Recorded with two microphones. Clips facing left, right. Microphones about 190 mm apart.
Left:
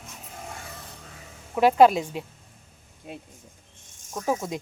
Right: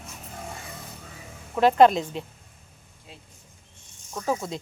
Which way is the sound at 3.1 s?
60° left (ahead or behind).